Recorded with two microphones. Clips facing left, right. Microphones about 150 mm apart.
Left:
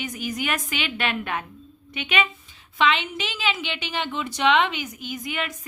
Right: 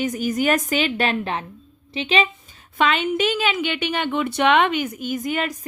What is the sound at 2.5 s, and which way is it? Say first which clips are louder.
A woman's voice: right 2 dB; 45° right (ahead or behind).